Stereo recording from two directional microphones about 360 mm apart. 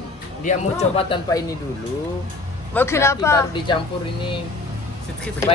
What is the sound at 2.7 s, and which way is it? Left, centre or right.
Speech, centre.